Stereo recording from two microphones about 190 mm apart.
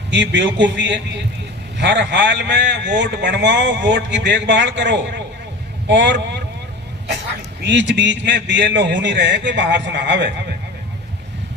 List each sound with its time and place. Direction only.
0.1 s a man's voice: 70° right (ahead or behind)
7.6 s a man's voice: 70° right (ahead or behind)